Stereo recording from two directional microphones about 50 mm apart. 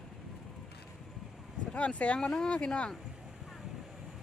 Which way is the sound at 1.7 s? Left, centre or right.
Left.